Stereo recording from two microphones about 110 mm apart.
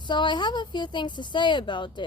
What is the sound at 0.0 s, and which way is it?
Speech, 45° left (ahead or behind).